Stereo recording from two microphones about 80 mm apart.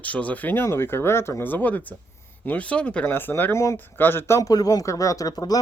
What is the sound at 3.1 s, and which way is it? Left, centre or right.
Speech, left.